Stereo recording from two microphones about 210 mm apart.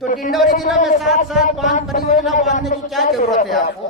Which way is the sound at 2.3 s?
35° left (ahead or behind).